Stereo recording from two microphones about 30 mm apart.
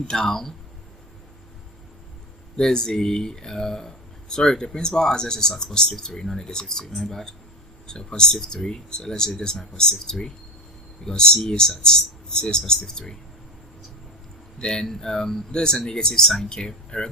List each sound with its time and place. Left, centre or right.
0.1 s speech: centre
2.6 s speech: left
7.9 s speech: left
14.6 s speech: left
14.8 s speech: centre
15.5 s speech: left